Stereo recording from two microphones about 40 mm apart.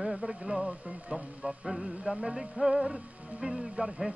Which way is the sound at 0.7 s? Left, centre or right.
Right.